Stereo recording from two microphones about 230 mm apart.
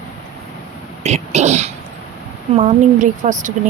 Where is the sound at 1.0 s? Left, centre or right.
Right.